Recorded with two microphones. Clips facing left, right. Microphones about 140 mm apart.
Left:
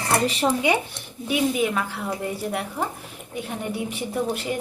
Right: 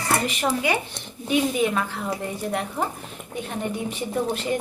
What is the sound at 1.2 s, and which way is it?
Speech, 10° left (ahead or behind).